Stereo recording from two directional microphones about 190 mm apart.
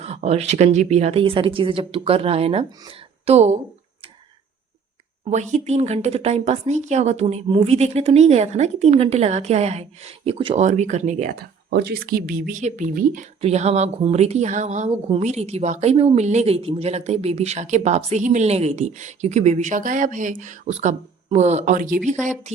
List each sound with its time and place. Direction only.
0.0 s speech: 35° right (ahead or behind)
5.2 s speech: 35° right (ahead or behind)